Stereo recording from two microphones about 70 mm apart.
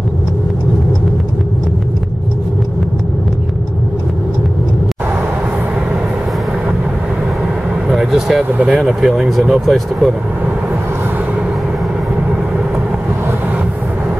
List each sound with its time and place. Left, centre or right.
7.9 s vehicle: centre
8.5 s speech: right
8.7 s speech: centre